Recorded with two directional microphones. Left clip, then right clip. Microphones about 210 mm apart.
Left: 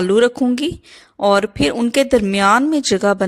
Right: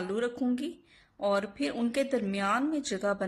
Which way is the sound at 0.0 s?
45° left (ahead or behind).